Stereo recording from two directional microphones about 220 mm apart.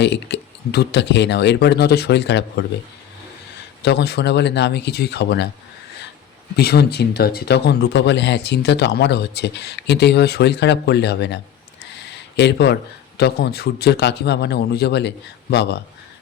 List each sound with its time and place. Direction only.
0.0 s speech: 50° left (ahead or behind)
3.8 s speech: 50° left (ahead or behind)
6.6 s speech: 45° left (ahead or behind)
11.9 s a sound: 50° left (ahead or behind)
13.1 s speech: 50° left (ahead or behind)